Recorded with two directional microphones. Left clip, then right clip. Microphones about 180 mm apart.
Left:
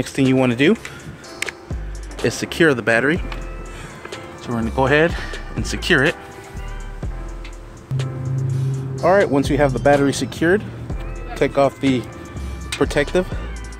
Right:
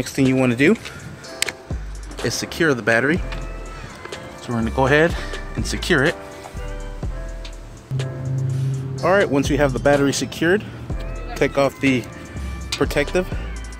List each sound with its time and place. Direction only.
0.0 s speech: 20° left (ahead or behind)
2.2 s speech: 20° left (ahead or behind)
4.5 s speech: 15° left (ahead or behind)
8.0 s speech: centre (ahead or behind)
13.1 s speech: 20° left (ahead or behind)